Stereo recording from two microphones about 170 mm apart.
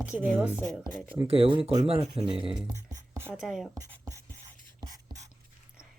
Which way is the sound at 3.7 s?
20° right (ahead or behind).